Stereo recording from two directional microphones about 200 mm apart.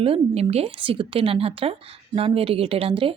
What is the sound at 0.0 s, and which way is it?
Speech, 30° right (ahead or behind).